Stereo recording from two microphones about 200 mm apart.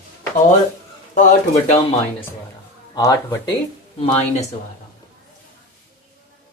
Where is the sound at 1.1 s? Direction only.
40° left (ahead or behind).